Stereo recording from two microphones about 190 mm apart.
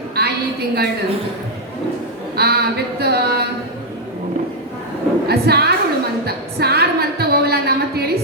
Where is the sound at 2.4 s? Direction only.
55° right (ahead or behind).